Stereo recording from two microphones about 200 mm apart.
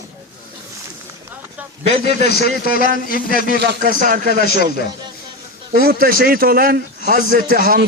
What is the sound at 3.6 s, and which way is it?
Speech, 55° right (ahead or behind).